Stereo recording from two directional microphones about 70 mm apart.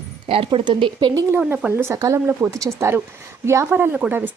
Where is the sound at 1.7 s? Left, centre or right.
Right.